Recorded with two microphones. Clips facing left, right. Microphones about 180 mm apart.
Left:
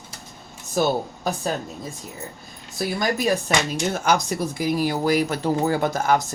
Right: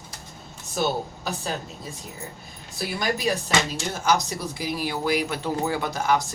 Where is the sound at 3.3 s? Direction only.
50° left (ahead or behind).